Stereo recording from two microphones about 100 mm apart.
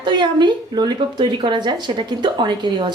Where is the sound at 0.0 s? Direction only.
50° right (ahead or behind).